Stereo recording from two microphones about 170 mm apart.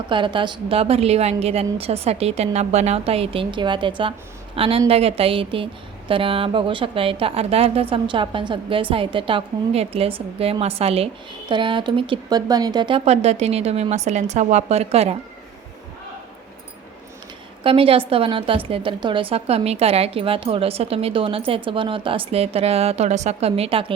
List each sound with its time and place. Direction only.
0.1 s a woman's voice: 30° right (ahead or behind)
17.6 s a woman's voice: 35° right (ahead or behind)